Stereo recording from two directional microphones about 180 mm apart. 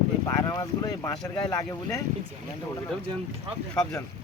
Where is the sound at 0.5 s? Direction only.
20° left (ahead or behind).